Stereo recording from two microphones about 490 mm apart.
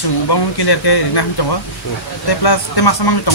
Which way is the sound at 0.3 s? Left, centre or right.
Left.